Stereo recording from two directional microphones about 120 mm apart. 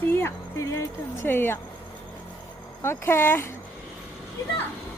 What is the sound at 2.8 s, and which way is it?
Speech, 20° left (ahead or behind).